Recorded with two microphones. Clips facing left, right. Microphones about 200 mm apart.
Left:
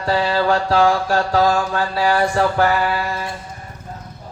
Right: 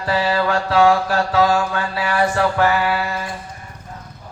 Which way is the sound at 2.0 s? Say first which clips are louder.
Left 1 dB; 35° left (ahead or behind).